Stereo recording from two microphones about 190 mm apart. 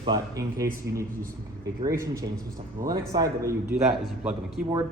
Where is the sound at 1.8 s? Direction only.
15° right (ahead or behind).